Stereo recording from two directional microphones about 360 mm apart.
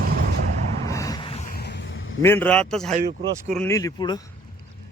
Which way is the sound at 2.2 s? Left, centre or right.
Centre.